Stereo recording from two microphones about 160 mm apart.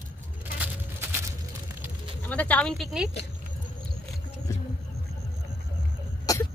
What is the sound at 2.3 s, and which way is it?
Speech, 10° left (ahead or behind).